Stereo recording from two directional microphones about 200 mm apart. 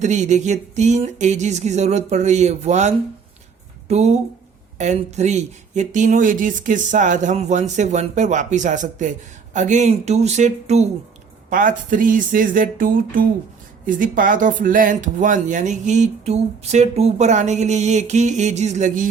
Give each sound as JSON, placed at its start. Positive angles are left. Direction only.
{"t": 0.0, "sound": "speech", "side_deg": -35}